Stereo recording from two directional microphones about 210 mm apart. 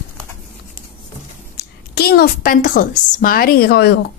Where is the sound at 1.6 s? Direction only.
50° left (ahead or behind).